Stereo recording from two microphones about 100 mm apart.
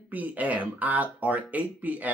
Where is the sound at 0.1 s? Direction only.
15° right (ahead or behind).